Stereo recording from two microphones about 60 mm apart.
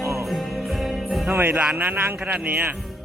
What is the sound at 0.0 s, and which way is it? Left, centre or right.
Music, right.